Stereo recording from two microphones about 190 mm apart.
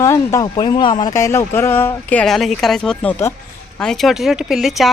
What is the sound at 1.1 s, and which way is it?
Speech, 15° left (ahead or behind).